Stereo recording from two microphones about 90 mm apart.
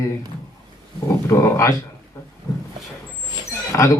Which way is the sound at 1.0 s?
35° left (ahead or behind).